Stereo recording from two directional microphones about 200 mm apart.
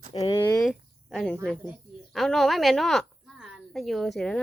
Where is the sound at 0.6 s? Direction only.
Centre (ahead or behind).